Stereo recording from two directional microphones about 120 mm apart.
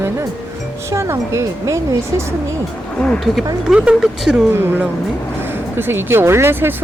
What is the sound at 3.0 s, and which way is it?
Speech, 5° left (ahead or behind).